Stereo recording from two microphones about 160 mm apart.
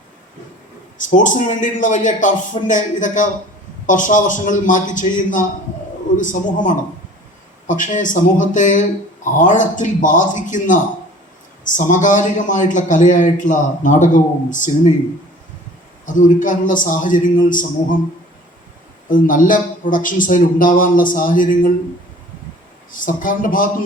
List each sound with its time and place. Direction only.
0.9 s a man's voice: 55° left (ahead or behind)
16.1 s a man's voice: 55° left (ahead or behind)
19.0 s a man's voice: 55° left (ahead or behind)
22.9 s a man's voice: 60° left (ahead or behind)